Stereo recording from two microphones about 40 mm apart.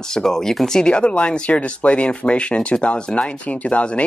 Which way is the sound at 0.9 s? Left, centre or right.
Left.